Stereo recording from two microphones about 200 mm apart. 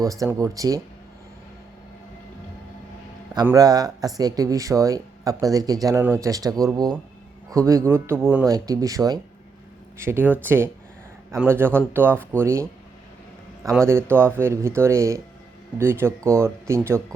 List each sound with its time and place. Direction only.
0.0 s speech: 15° right (ahead or behind)
3.4 s speech: 15° right (ahead or behind)
13.8 s speech: 10° right (ahead or behind)